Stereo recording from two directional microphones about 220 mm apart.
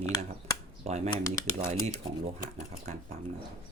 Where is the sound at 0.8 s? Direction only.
30° right (ahead or behind).